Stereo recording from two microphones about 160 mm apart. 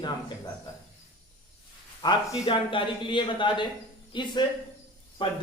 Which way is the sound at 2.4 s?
30° left (ahead or behind).